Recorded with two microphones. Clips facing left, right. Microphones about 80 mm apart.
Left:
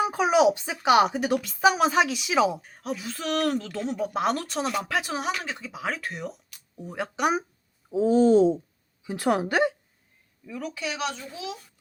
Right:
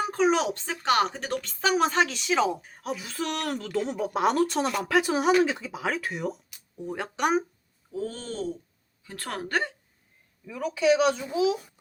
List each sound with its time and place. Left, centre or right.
0.0 s speech: centre
7.9 s a woman's voice: centre
10.4 s a child's voice: centre